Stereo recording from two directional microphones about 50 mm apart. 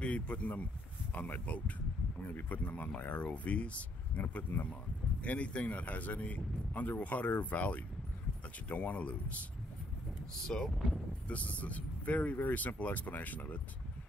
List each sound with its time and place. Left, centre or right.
0.0 s speech: left
4.3 s speech: left
5.2 s speech: left
10.4 s speech: centre
11.2 s speech: left